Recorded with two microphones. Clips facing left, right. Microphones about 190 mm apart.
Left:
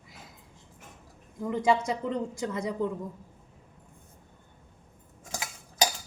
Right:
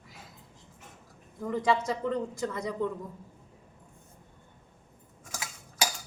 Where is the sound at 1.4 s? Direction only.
25° left (ahead or behind).